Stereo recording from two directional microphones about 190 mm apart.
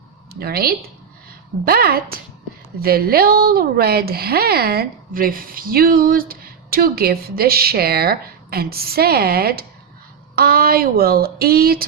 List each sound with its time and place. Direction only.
0.3 s a woman's voice: 55° right (ahead or behind)